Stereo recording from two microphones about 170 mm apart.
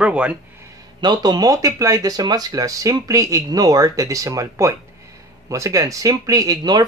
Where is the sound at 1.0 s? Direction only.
25° right (ahead or behind).